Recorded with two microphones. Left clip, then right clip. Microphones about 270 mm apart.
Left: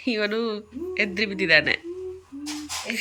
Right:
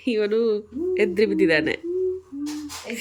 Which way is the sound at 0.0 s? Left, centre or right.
Centre.